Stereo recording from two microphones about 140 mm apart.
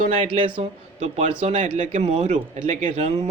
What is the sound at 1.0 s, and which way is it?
Speech, 55° right (ahead or behind).